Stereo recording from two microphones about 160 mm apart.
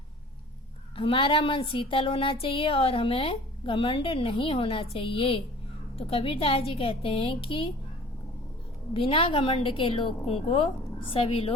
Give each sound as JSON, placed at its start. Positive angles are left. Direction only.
{"t": 0.9, "sound": "a woman's voice", "side_deg": 35}
{"t": 8.9, "sound": "a woman's voice", "side_deg": 35}